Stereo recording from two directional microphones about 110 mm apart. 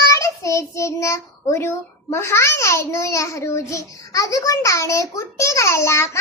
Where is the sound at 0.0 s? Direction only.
30° left (ahead or behind).